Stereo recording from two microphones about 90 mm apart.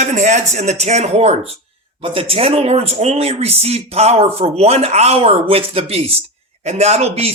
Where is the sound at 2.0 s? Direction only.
90° right.